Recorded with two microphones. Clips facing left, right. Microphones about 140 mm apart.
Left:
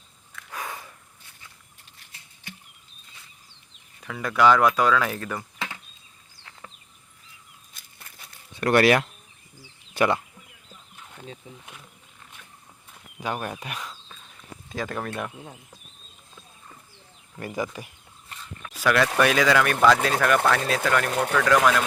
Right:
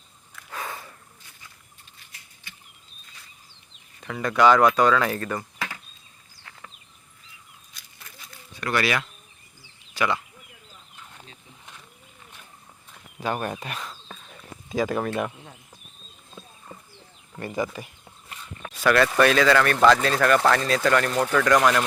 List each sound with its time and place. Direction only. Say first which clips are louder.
0.5 s a sound: right 1 dB; 10° left (ahead or behind)
4.0 s speech: right 1 dB; 5° left (ahead or behind)
5.5 s chop: right 1 dB; 20° left (ahead or behind)
7.9 s a sound: right 2 dB; 55° left (ahead or behind)
9.9 s speech: left 3 dB; 50° left (ahead or behind)
13.1 s speech: right 2 dB; 10° left (ahead or behind)
14.7 s speech: right 6 dB; 5° right (ahead or behind)
17.4 s speech: right 2 dB; 10° left (ahead or behind)